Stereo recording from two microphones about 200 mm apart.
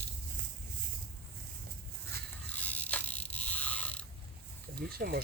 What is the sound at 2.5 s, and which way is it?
Mechanisms, 5° left (ahead or behind).